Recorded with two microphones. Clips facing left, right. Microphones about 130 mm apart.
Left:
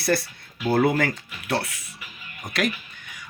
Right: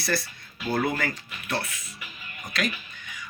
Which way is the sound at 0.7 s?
40° left (ahead or behind).